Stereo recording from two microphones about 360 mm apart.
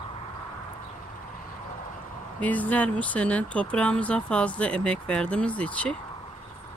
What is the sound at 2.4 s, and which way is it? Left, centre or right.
Speech, centre.